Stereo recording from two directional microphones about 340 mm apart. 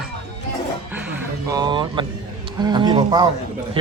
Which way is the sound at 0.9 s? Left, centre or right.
Centre.